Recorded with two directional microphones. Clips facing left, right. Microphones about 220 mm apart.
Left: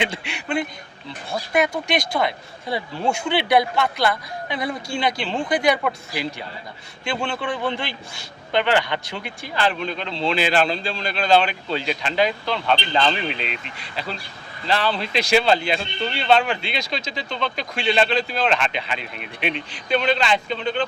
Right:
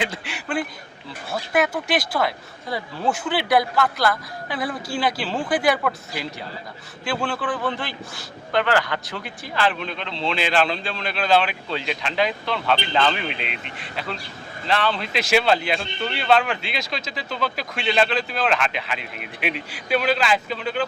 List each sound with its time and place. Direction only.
0.0 s speech: centre (ahead or behind)
7.0 s speech: 5° right (ahead or behind)
13.3 s speech: 35° left (ahead or behind)
13.7 s speech: centre (ahead or behind)